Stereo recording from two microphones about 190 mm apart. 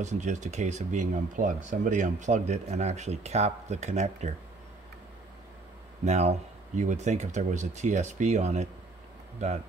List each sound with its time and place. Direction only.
0.0 s speech: 40° right (ahead or behind)
6.0 s speech: 35° right (ahead or behind)